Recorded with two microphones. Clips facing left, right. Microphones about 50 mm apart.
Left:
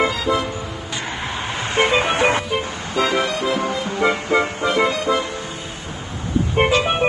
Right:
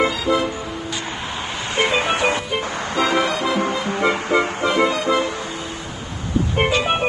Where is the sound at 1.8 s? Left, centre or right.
Left.